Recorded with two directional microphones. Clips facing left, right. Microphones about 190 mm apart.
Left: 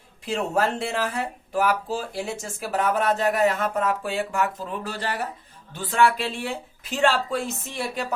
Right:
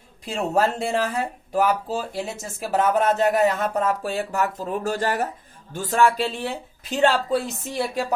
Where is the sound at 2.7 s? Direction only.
40° right (ahead or behind).